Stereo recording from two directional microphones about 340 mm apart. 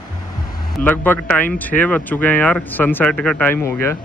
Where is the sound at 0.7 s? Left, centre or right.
Centre.